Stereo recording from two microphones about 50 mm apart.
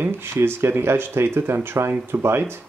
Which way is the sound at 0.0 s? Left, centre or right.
Right.